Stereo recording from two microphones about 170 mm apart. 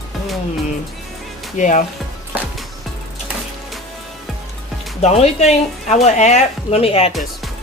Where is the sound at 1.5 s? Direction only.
45° left (ahead or behind).